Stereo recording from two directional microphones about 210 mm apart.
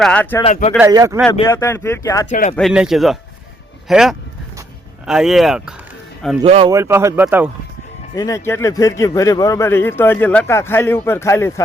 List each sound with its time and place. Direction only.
0.0 s a man's voice: 5° left (ahead or behind)
0.8 s speech: 15° right (ahead or behind)
1.3 s a man's voice: 15° left (ahead or behind)
2.6 s speech: centre (ahead or behind)
6.4 s speech: 25° right (ahead or behind)
6.7 s speech: 15° right (ahead or behind)
8.1 s a man's voice: 15° left (ahead or behind)